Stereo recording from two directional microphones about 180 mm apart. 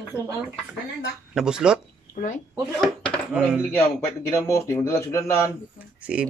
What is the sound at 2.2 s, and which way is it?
Speech, 45° left (ahead or behind).